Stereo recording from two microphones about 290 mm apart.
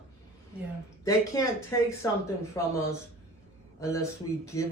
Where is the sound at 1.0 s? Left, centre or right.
Centre.